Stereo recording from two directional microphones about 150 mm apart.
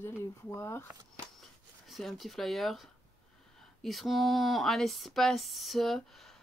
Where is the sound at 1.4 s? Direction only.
Centre (ahead or behind).